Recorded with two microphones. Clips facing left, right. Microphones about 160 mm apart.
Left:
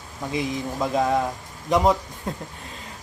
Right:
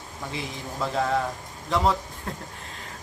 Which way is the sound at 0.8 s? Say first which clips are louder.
Left 3 dB; 15° left (ahead or behind).